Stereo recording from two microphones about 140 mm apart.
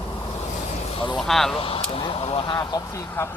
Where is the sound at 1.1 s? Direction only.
Centre (ahead or behind).